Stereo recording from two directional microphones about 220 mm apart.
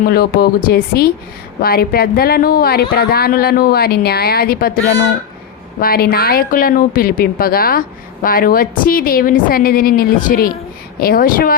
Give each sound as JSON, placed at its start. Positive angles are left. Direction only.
{"t": 0.0, "sound": "speech", "side_deg": 45}